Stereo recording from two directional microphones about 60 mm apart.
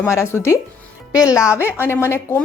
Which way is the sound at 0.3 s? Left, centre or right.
Left.